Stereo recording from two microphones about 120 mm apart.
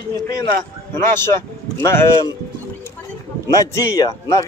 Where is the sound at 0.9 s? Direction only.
20° left (ahead or behind).